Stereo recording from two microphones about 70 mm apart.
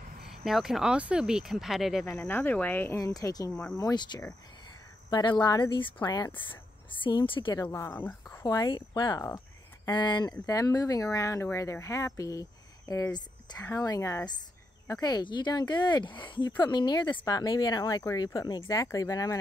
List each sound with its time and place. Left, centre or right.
0.4 s speech: centre
2.1 s speech: left
3.0 s speech: left
3.9 s speech: left
6.0 s speech: left
7.1 s speech: left
7.9 s speech: left
8.5 s speech: left
10.4 s speech: left
13.8 s a woman's voice: left
14.9 s speech: left
17.3 s speech: left
18.7 s speech: left